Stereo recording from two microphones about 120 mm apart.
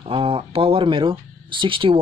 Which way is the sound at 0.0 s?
50° right (ahead or behind).